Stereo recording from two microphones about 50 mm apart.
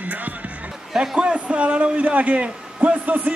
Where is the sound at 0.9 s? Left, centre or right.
Centre.